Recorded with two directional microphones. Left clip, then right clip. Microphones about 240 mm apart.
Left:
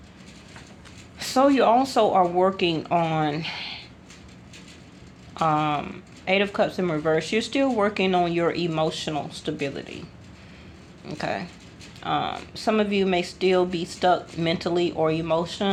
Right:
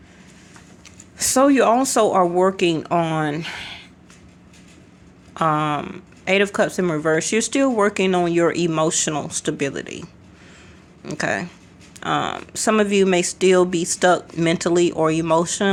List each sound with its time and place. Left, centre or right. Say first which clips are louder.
1.2 s speech: right 3 dB; right
5.3 s speech: right 3 dB; right